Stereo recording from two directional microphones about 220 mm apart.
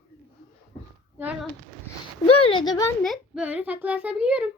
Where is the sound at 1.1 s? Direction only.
5° right (ahead or behind).